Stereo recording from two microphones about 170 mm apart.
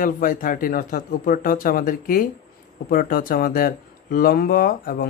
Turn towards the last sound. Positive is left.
turn(degrees=55)  # may be behind; listen again after turning